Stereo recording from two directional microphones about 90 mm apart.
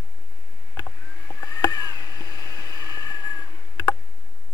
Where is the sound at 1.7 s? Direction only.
45° left (ahead or behind).